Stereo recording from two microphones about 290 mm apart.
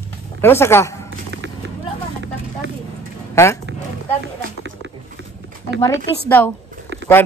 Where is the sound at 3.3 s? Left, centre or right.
Centre.